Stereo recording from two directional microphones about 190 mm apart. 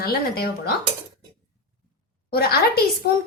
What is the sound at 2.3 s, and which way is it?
Speech, 55° left (ahead or behind).